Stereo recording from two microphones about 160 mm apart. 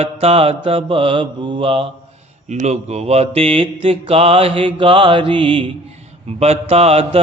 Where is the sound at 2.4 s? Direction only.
45° right (ahead or behind).